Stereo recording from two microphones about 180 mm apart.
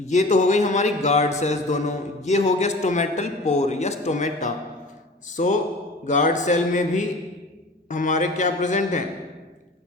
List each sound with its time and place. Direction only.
0.0 s a man's voice: 40° left (ahead or behind)